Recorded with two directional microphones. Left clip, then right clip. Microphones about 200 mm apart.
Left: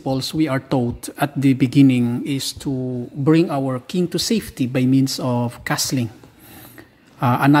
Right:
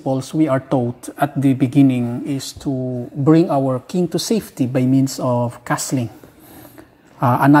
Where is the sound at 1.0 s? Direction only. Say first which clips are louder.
Right 1 dB; 20° left (ahead or behind).